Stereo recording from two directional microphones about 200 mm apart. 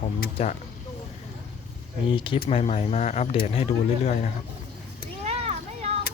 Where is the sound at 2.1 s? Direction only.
25° left (ahead or behind).